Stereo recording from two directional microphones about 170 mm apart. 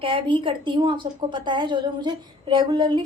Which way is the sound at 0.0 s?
30° right (ahead or behind).